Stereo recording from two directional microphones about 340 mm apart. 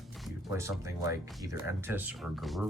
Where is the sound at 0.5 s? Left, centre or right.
Centre.